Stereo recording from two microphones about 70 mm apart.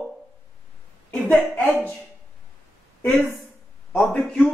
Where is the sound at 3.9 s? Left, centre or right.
Centre.